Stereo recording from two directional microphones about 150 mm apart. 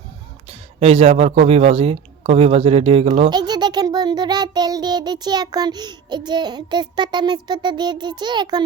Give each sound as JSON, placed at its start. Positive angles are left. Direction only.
{"t": 0.8, "sound": "a man's voice", "side_deg": -45}
{"t": 3.2, "sound": "a child's voice", "side_deg": -30}